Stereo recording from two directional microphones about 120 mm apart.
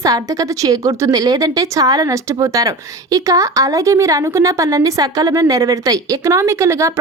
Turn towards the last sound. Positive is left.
turn(degrees=-25)  # may be behind; listen again after turning